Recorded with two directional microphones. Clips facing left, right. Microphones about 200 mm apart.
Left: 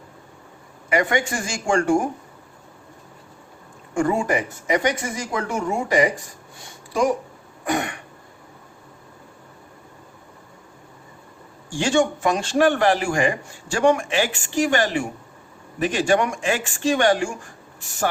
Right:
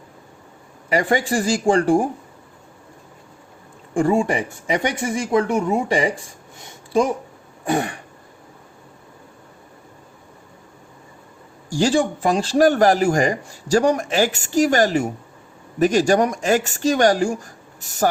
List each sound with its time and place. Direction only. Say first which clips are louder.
0.9 s speech: right 2 dB; 35° right (ahead or behind)
3.9 s speech: right 3 dB; 25° right (ahead or behind)
7.6 s throat clearing: right 3 dB; 30° right (ahead or behind)
11.7 s speech: right 2 dB; 35° right (ahead or behind)